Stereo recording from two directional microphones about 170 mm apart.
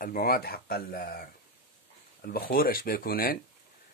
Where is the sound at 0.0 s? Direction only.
60° left (ahead or behind).